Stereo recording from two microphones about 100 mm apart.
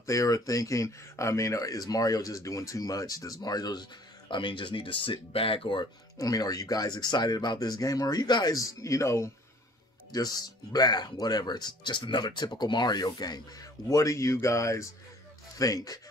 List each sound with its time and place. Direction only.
0.0 s speech: 35° left (ahead or behind)
4.3 s speech: 55° left (ahead or behind)
6.1 s speech: 40° left (ahead or behind)
10.1 s speech: 40° left (ahead or behind)